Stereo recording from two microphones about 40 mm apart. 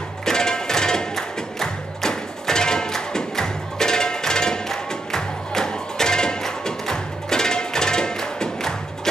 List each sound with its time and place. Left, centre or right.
0.2 s music: centre